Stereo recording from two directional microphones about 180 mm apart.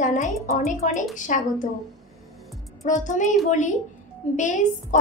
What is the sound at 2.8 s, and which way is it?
A woman's voice, 45° left (ahead or behind).